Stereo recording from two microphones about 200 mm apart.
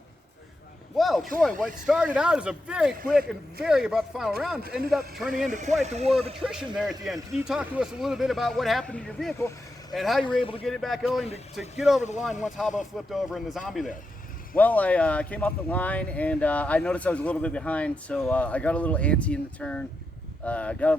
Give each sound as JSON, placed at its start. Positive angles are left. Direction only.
{"t": 0.9, "sound": "speech", "side_deg": 0}
{"t": 5.5, "sound": "speech", "side_deg": -35}
{"t": 7.0, "sound": "speech", "side_deg": 0}
{"t": 10.2, "sound": "a man's voice", "side_deg": 25}
{"t": 10.6, "sound": "speech", "side_deg": 0}